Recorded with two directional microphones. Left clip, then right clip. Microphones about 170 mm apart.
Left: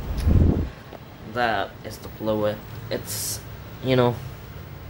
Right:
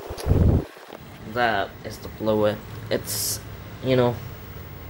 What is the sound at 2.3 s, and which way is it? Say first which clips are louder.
Speech: right 3 dB; 30° right (ahead or behind).